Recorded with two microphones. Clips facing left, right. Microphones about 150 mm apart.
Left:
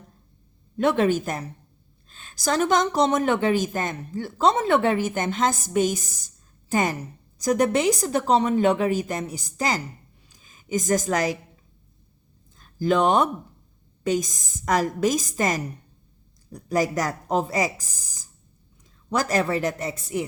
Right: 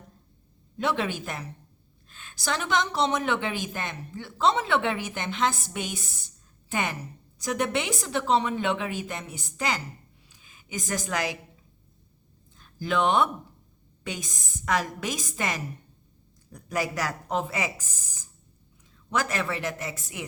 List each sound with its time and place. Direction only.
0.8 s a woman's voice: 50° left (ahead or behind)
12.5 s a woman's voice: 40° left (ahead or behind)